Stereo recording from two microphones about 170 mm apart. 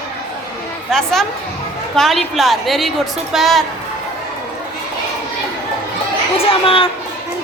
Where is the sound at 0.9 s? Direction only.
Centre (ahead or behind).